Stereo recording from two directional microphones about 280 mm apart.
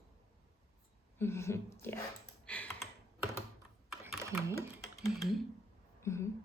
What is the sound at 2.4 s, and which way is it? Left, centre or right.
Computer keyboard, centre.